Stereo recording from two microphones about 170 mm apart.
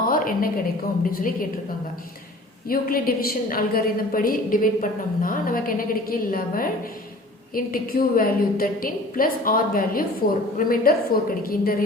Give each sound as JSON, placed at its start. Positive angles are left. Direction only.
{"t": 0.0, "sound": "a sound", "side_deg": 55}
{"t": 1.1, "sound": "a woman's voice", "side_deg": 55}
{"t": 2.6, "sound": "a woman's voice", "side_deg": 60}